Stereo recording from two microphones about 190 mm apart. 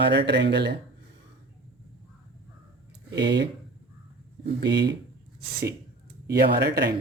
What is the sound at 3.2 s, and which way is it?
Speech, 65° right (ahead or behind).